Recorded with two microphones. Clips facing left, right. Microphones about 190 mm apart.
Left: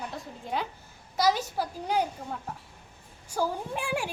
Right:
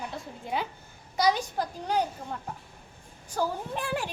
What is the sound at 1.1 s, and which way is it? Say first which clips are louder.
A child's voice: even; 5° left (ahead or behind).